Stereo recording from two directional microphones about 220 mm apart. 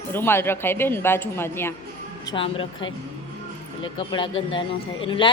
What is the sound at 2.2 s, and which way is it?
Speech, 25° left (ahead or behind).